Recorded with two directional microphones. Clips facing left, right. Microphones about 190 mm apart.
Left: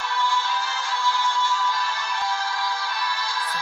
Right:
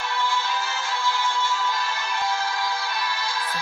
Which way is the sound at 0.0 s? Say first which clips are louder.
Left 1 dB; 20° right (ahead or behind).